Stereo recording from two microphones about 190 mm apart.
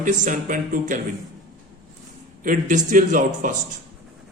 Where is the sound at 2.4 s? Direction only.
40° right (ahead or behind).